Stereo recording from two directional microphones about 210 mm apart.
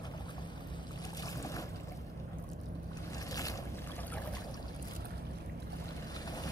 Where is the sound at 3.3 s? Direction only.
15° left (ahead or behind).